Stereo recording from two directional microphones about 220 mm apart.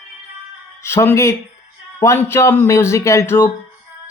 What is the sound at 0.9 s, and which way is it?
Speech, 10° left (ahead or behind).